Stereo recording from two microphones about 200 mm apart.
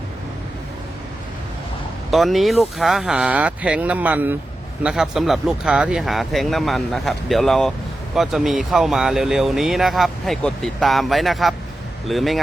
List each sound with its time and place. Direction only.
2.0 s speech: centre (ahead or behind)